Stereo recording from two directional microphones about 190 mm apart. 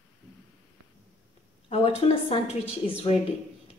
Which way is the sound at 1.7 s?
30° left (ahead or behind).